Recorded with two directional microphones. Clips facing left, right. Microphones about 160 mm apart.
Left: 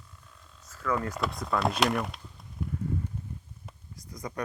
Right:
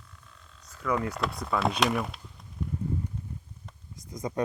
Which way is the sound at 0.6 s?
5° left (ahead or behind).